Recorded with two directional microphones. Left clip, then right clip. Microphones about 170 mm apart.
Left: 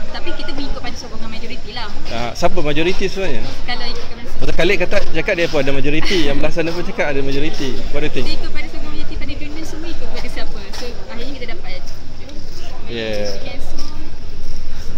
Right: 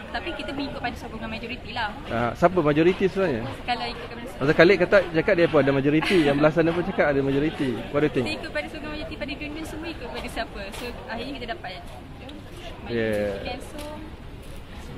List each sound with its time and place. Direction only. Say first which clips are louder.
0.4 s a sound: left 2 dB; centre (ahead or behind)
2.1 s speech: left 2 dB; 30° right (ahead or behind)
3.6 s speech: left 2 dB; centre (ahead or behind)
4.6 s speech: left 1 dB; 30° right (ahead or behind)
8.3 s a sound: left 1 dB; centre (ahead or behind)
12.9 s speech: left 3 dB; 25° right (ahead or behind)